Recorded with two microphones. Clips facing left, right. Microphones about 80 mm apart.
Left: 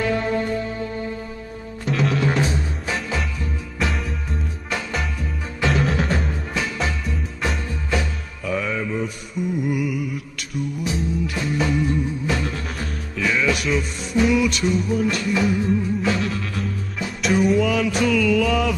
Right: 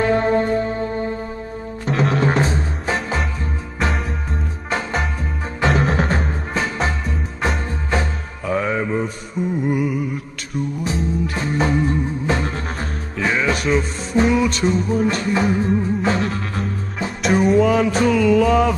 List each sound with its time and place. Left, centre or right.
0.0 s music: right
4.6 s music: right
17.6 s mantra: right